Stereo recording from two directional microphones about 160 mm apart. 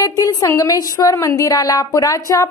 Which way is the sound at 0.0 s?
20° left (ahead or behind).